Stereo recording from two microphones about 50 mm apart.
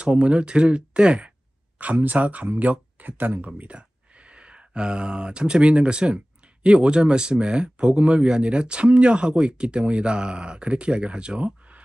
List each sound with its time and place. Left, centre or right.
0.0 s speech: right
1.8 s speech: right